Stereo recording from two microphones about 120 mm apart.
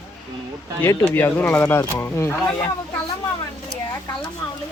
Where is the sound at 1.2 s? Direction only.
15° left (ahead or behind).